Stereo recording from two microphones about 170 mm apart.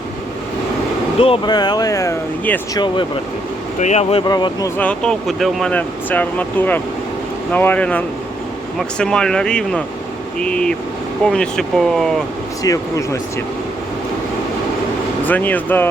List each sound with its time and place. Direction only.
1.2 s speech: 30° left (ahead or behind)
3.8 s speech: 40° left (ahead or behind)
4.3 s speech: 25° left (ahead or behind)
4.8 s speech: 5° left (ahead or behind)
12.6 s speech: 20° left (ahead or behind)
15.3 s speech: 10° left (ahead or behind)